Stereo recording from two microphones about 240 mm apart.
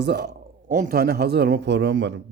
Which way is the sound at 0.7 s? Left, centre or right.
Right.